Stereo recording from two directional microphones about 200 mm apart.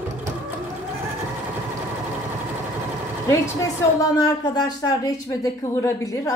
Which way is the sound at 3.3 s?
15° left (ahead or behind).